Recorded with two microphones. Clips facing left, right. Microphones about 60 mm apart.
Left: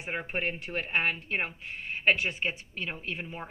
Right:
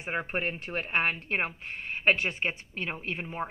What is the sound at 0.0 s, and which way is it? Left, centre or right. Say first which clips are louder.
A woman's voice: right 1 dB; right.